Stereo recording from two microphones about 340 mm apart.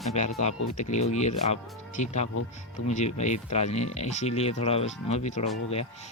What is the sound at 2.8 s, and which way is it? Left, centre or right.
Speech, centre.